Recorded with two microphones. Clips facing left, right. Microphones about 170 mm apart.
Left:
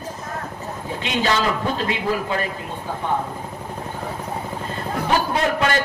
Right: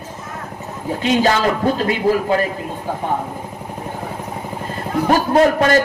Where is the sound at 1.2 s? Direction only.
40° right (ahead or behind).